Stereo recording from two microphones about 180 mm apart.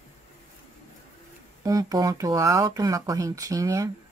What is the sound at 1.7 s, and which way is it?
Speech, 20° right (ahead or behind).